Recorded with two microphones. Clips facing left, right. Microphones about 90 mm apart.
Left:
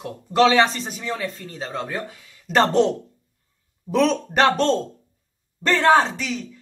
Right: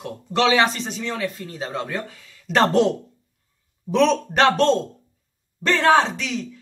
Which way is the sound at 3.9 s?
Centre (ahead or behind).